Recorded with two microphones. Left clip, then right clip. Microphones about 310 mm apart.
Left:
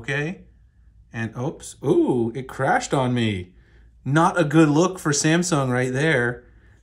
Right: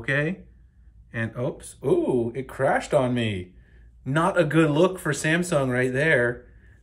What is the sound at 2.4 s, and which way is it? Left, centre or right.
Speech, centre.